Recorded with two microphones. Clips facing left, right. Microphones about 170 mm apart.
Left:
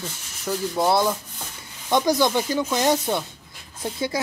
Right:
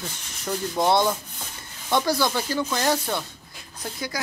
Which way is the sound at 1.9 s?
20° left (ahead or behind).